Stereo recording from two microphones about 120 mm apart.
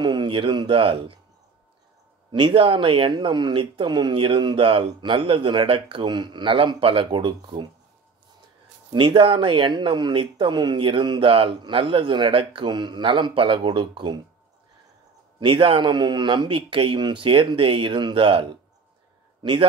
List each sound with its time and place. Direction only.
0.0 s speech: 40° right (ahead or behind)
2.3 s speech: 45° right (ahead or behind)
8.9 s speech: 45° right (ahead or behind)
15.3 s speech: 45° right (ahead or behind)